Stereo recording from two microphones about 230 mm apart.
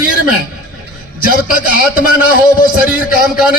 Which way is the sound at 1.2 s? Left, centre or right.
Left.